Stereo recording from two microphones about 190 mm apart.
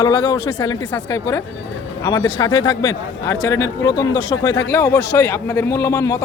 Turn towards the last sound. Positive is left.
turn(degrees=15)  # may be behind; listen again after turning